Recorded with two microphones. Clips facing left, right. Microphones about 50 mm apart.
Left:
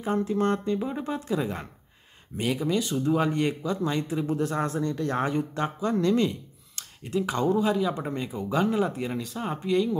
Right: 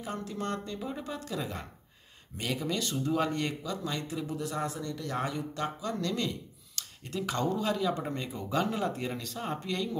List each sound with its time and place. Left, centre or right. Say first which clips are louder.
0.0 s speech: left 10 dB; left
2.3 s speech: left 7 dB; centre
4.3 s speech: left 6 dB; left; by 9.8 s centre